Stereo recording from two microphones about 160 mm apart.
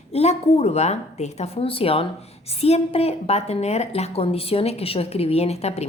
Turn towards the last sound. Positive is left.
turn(degrees=40)  # may be behind; listen again after turning